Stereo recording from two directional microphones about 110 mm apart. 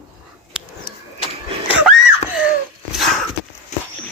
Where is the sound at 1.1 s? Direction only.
55° left (ahead or behind).